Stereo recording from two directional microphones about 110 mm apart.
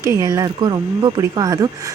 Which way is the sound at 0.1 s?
30° right (ahead or behind).